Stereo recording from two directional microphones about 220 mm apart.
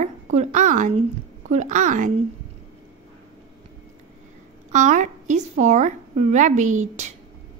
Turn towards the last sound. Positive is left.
turn(degrees=-35)  # may be behind; listen again after turning